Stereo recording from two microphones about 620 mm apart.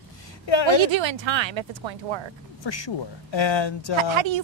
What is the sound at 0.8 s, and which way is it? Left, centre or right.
A woman's voice, right.